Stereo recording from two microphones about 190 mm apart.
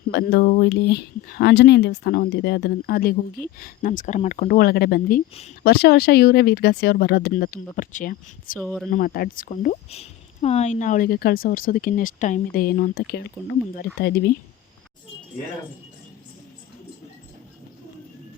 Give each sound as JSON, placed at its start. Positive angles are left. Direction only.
{"t": 0.1, "sound": "speech", "side_deg": 60}
{"t": 8.5, "sound": "speech", "side_deg": 0}
{"t": 8.9, "sound": "speech", "side_deg": 50}
{"t": 9.9, "sound": "speech", "side_deg": 35}